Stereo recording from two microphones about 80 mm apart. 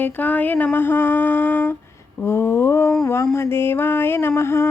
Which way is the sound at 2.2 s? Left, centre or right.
Left.